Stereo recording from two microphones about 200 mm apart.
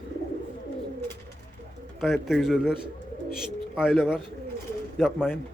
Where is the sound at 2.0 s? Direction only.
Centre (ahead or behind).